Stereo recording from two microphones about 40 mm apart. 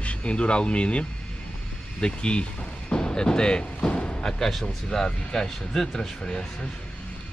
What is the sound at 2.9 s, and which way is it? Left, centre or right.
Music, left.